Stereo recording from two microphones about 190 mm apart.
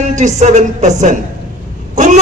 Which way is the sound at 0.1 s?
40° right (ahead or behind).